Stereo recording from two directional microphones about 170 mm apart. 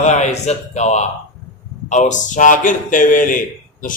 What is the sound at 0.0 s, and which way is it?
A man's voice, 45° left (ahead or behind).